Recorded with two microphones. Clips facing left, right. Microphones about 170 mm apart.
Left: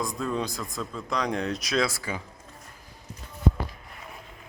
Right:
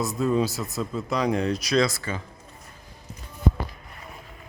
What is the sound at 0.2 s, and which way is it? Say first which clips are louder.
Speech: right 6 dB; 5° right (ahead or behind).